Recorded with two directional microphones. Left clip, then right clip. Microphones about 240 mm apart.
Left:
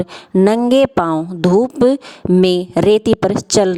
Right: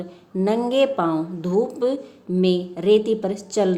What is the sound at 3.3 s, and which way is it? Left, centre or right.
Speech, left.